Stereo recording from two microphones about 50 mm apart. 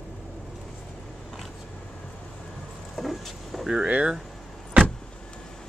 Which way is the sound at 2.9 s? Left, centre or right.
Centre.